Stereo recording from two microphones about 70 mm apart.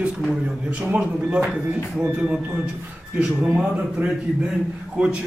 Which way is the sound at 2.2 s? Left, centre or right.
Centre.